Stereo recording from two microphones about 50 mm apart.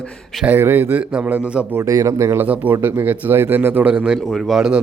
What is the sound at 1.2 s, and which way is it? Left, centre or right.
Speech, right.